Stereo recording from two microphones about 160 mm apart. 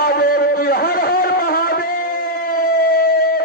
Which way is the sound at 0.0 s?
65° left (ahead or behind).